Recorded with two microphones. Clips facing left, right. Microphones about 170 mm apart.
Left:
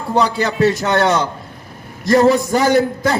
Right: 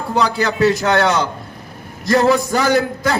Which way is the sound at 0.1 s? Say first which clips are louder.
Left 1 dB; 25° left (ahead or behind).